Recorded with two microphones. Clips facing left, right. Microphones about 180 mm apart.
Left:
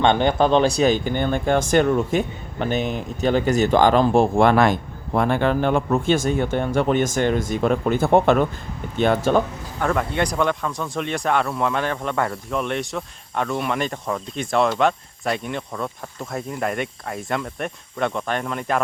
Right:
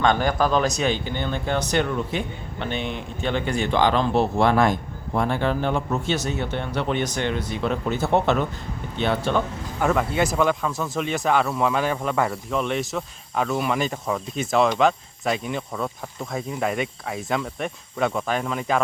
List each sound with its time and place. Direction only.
0.0 s speech: 25° left (ahead or behind); by 4.5 s 50° left (ahead or behind)
4.5 s speech: 75° left (ahead or behind); by 9.4 s 45° left (ahead or behind)
9.8 s speech: 5° right (ahead or behind)